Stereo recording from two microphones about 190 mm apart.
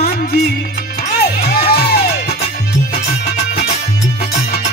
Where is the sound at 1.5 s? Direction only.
55° left (ahead or behind).